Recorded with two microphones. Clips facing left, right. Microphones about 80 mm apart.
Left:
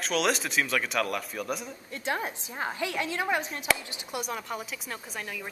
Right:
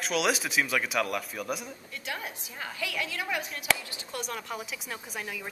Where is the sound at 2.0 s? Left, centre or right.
Left.